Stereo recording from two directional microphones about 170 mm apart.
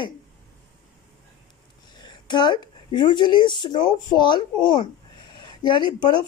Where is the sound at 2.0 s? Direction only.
25° left (ahead or behind).